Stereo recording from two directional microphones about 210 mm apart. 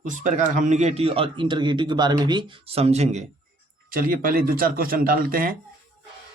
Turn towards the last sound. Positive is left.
turn(degrees=-40)  # may be behind; listen again after turning